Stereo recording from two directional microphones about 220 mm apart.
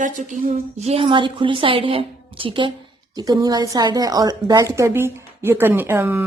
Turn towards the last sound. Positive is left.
turn(degrees=-10)  # may be behind; listen again after turning